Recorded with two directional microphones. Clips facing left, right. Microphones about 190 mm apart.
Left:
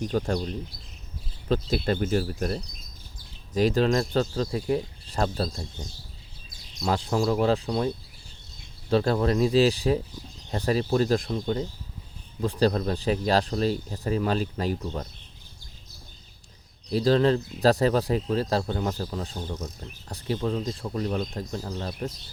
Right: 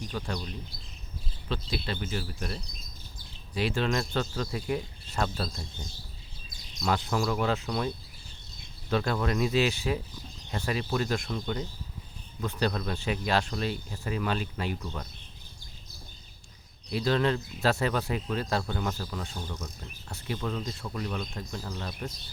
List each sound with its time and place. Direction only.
0.0 s speech: 45° left (ahead or behind)
1.5 s speech: 45° left (ahead or behind)
6.7 s speech: 30° left (ahead or behind)
16.9 s speech: 35° left (ahead or behind)